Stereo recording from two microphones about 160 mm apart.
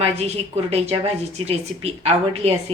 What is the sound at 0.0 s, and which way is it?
A woman's voice, 40° right (ahead or behind).